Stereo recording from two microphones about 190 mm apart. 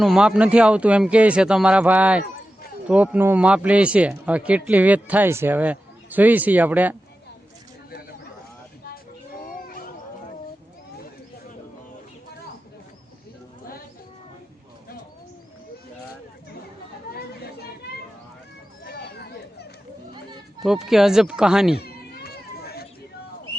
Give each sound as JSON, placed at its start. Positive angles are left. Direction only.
{"t": 0.0, "sound": "speech", "side_deg": -5}
{"t": 9.4, "sound": "cat", "side_deg": 50}
{"t": 17.2, "sound": "chatter", "side_deg": 55}
{"t": 17.9, "sound": "a sound", "side_deg": 55}
{"t": 20.1, "sound": "a sound", "side_deg": -25}
{"t": 20.7, "sound": "speech", "side_deg": 0}
{"t": 21.8, "sound": "children playing", "side_deg": 55}